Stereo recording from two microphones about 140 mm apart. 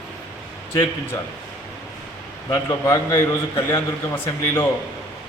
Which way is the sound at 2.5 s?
20° left (ahead or behind).